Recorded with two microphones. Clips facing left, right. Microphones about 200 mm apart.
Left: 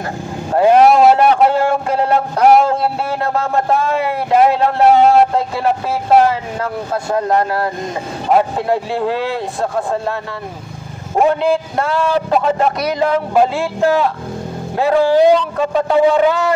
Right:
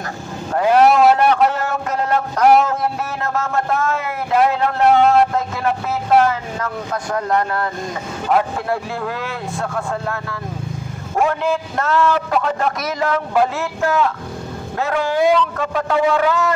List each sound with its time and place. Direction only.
0.5 s a sound: 30° left (ahead or behind)
3.3 s a man's voice: 35° left (ahead or behind)
6.2 s a man's voice: 30° left (ahead or behind)
11.2 s a man's voice: 20° left (ahead or behind)